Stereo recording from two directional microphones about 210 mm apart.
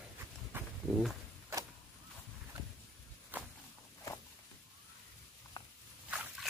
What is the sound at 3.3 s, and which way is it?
Walk, 10° right (ahead or behind).